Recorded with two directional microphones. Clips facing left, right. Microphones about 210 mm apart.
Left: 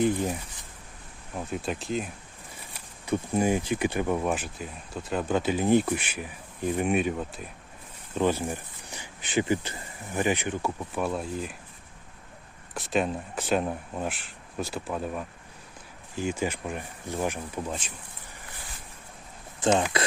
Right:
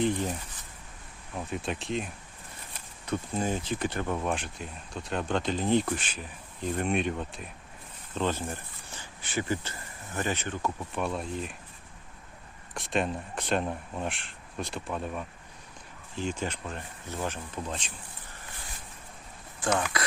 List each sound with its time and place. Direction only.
1.5 s speech: centre (ahead or behind)
12.7 s speech: centre (ahead or behind)
19.5 s speech: 25° left (ahead or behind)